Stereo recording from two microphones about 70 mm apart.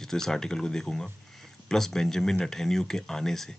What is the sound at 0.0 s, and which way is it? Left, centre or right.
Speech, centre.